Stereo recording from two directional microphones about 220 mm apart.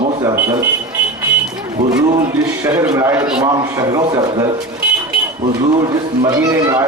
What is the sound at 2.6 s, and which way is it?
A man's voice, 10° right (ahead or behind).